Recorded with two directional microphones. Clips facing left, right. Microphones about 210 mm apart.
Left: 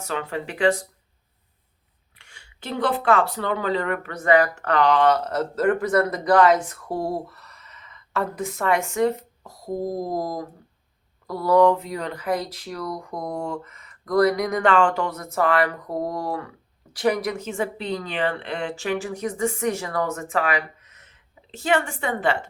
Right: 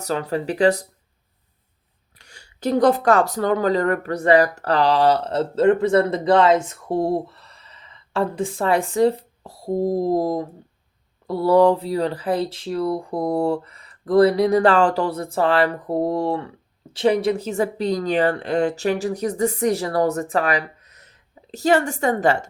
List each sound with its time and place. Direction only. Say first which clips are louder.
0.0 s speech: right 5 dB; 40° right (ahead or behind)
2.1 s speech: right 5 dB; 40° right (ahead or behind)